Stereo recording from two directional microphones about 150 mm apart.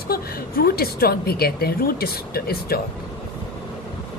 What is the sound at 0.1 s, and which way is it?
A woman's voice, 85° left.